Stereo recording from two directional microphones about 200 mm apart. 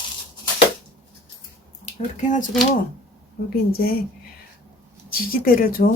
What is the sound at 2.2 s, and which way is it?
Speech, 40° left (ahead or behind).